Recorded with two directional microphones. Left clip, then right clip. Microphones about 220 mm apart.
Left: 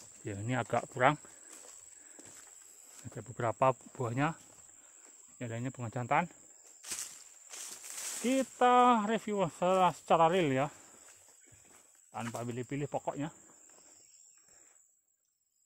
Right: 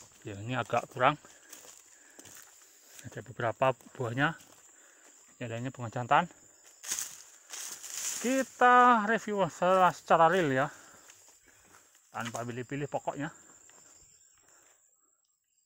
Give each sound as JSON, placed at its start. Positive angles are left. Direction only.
{"t": 0.2, "sound": "speech", "side_deg": 20}
{"t": 1.5, "sound": "dog", "side_deg": -45}
{"t": 3.0, "sound": "speech", "side_deg": 5}
{"t": 5.4, "sound": "speech", "side_deg": 0}
{"t": 6.8, "sound": "a sound", "side_deg": -35}
{"t": 8.3, "sound": "speech", "side_deg": 0}
{"t": 12.4, "sound": "speech", "side_deg": 5}